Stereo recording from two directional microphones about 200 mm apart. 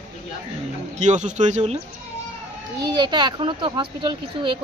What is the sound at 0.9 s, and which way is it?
Speech, 35° right (ahead or behind).